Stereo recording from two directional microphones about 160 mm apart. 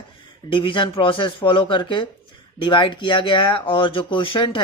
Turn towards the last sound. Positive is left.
turn(degrees=30)  # may be behind; listen again after turning